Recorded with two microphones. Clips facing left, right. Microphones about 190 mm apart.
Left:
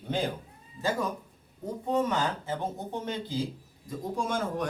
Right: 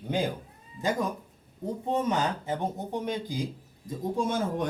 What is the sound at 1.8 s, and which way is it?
Speech, 20° right (ahead or behind).